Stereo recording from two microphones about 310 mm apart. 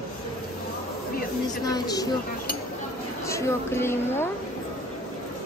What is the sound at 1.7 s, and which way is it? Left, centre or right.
Speech, centre.